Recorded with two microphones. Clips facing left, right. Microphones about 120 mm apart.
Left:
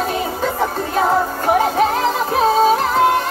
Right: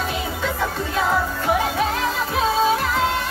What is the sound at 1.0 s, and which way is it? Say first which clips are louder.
Music: left 5 dB; 45° left (ahead or behind).